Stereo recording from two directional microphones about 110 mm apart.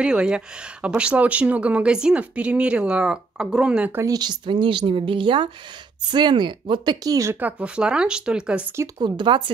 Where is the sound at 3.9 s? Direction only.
30° right (ahead or behind).